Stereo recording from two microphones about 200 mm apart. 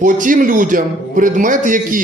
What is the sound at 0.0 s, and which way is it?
A man's voice, 40° right (ahead or behind).